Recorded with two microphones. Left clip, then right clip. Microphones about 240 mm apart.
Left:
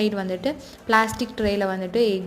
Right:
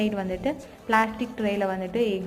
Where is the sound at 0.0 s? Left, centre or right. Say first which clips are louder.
Left 3 dB; left.